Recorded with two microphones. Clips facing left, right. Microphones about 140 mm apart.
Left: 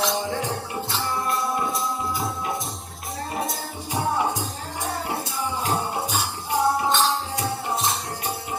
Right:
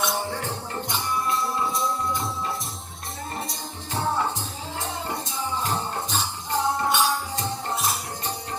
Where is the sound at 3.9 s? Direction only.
10° left (ahead or behind).